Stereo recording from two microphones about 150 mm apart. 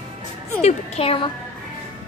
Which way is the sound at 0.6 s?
45° left (ahead or behind).